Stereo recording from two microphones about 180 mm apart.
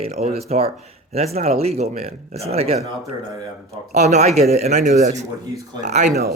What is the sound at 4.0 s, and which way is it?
Speech, 40° right (ahead or behind).